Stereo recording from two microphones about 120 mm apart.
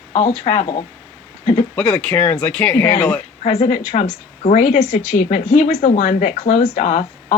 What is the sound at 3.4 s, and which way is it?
Speech, 55° left (ahead or behind).